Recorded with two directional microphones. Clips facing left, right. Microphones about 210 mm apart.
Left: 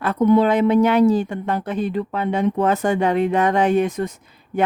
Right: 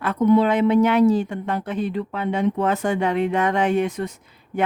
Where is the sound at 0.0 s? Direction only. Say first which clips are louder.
Left 1 dB; 40° left (ahead or behind).